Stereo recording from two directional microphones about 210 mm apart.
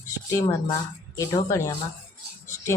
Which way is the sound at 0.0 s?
15° left (ahead or behind).